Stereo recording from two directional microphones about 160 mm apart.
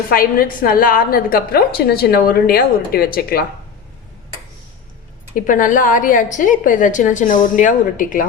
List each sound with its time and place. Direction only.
0.1 s a woman's voice: 65° left (ahead or behind)
5.3 s a woman's voice: 55° left (ahead or behind)